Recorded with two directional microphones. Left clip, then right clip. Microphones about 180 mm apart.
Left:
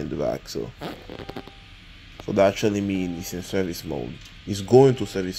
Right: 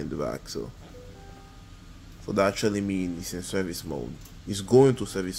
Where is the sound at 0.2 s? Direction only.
20° left (ahead or behind).